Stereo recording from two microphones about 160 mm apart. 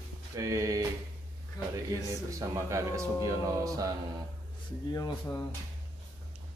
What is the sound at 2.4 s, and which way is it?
Speech, 20° right (ahead or behind).